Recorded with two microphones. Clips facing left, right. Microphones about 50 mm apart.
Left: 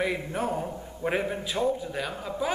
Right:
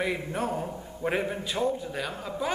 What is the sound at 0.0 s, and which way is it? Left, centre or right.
A man's voice, centre.